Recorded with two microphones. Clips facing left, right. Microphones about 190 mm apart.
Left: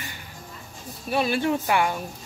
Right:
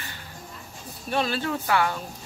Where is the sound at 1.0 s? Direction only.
10° left (ahead or behind).